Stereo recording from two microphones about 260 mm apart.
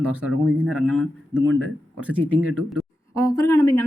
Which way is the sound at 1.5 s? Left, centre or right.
Right.